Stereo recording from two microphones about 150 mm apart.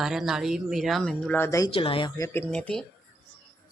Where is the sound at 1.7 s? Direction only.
35° left (ahead or behind); by 2.8 s 5° left (ahead or behind).